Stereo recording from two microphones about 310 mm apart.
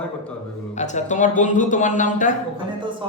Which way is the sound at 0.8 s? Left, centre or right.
Left.